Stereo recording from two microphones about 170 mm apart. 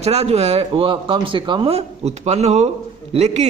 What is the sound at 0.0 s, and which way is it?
A man's voice, 40° right (ahead or behind).